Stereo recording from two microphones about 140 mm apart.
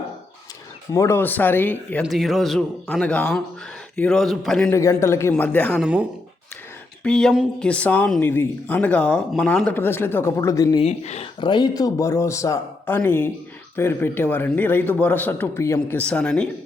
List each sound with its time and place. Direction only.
0.9 s speech: 20° left (ahead or behind)
2.0 s a man's voice: centre (ahead or behind)
4.7 s speech: 20° left (ahead or behind)
5.8 s speech: 10° right (ahead or behind)
7.0 s speech: 5° left (ahead or behind); by 10.8 s 25° left (ahead or behind)
10.8 s speech: 50° left (ahead or behind)
11.3 s speech: 35° left (ahead or behind); by 16.5 s 5° left (ahead or behind)